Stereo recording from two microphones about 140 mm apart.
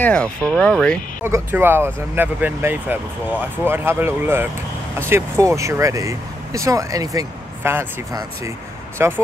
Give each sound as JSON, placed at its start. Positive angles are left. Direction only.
{"t": 0.0, "sound": "speech", "side_deg": 10}
{"t": 1.2, "sound": "speech", "side_deg": -15}